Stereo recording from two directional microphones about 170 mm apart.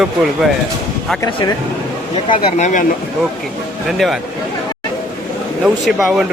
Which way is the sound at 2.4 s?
40° left (ahead or behind).